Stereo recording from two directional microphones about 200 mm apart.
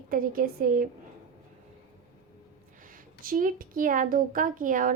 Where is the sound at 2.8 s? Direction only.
45° right (ahead or behind).